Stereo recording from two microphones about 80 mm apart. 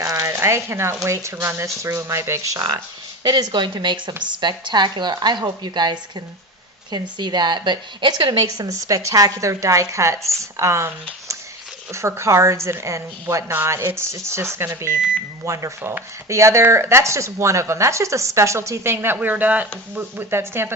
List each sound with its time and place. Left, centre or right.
0.0 s speech: right
2.6 s a woman's voice: right
3.2 s a woman's voice: right